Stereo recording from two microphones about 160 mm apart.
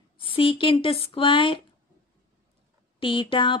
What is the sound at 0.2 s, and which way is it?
Speech, 35° left (ahead or behind).